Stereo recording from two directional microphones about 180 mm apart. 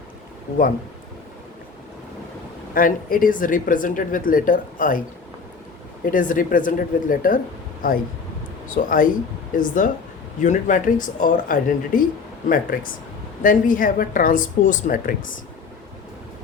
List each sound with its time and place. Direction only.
2.7 s speech: 50° left (ahead or behind)
6.1 s speech: 50° left (ahead or behind)